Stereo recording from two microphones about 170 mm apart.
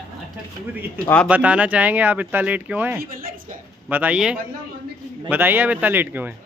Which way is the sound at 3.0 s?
60° right (ahead or behind).